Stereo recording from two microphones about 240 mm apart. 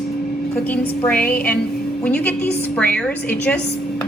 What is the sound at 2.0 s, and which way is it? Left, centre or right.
Speech, centre.